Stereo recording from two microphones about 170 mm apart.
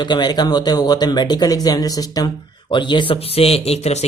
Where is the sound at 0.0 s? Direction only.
25° left (ahead or behind).